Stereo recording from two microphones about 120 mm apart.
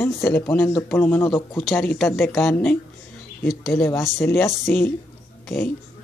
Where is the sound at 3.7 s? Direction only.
20° left (ahead or behind).